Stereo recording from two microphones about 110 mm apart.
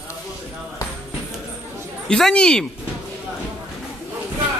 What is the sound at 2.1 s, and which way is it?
Speech, 5° left (ahead or behind).